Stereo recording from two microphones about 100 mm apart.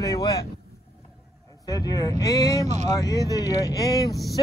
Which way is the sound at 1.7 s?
35° left (ahead or behind).